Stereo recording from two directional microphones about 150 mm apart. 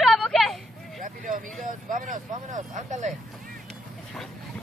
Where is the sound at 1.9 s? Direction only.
60° right (ahead or behind).